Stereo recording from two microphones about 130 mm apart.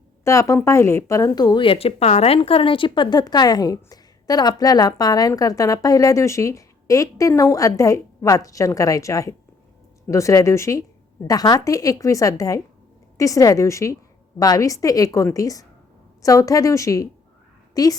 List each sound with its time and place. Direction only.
0.3 s speech: 25° left (ahead or behind)